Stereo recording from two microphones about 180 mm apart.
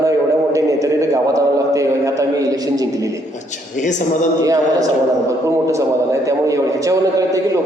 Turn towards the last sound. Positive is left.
turn(degrees=-20)  # may be behind; listen again after turning